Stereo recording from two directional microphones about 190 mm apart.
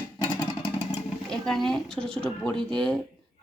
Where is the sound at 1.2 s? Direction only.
Centre (ahead or behind).